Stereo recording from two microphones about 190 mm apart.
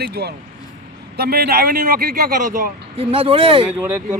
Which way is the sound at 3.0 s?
30° right (ahead or behind).